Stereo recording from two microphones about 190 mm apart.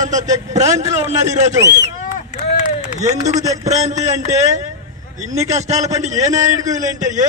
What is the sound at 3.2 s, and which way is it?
Speech, 20° right (ahead or behind).